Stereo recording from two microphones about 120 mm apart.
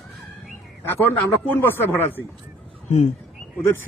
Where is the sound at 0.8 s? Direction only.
15° left (ahead or behind).